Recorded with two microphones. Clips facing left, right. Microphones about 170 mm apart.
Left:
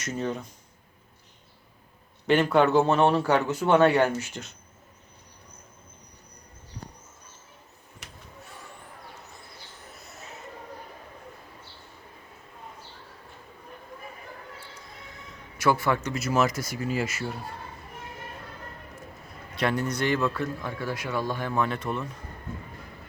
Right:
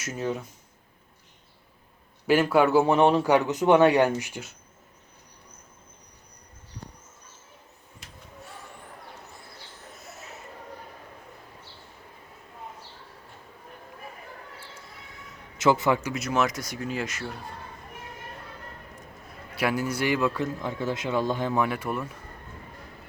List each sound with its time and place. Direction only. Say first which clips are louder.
0.0 s speech: even; 5° right (ahead or behind)
2.2 s a man's voice: even; 5° right (ahead or behind)
15.5 s a man's voice: right 2 dB; 20° right (ahead or behind)
16.1 s speech: left 1 dB; centre (ahead or behind)
19.5 s a man's voice: even; 5° right (ahead or behind)